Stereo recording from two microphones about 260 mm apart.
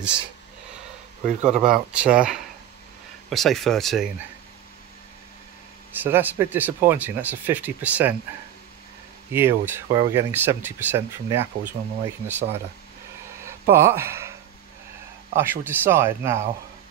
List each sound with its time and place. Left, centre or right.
1.2 s a man's voice: right
1.6 s speech: centre
6.0 s speech: centre
9.3 s speech: centre
13.5 s speech: centre
15.3 s speech: centre